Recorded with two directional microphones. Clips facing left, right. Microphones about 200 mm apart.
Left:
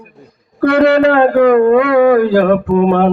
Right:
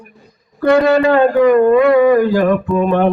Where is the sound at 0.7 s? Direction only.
60° left (ahead or behind).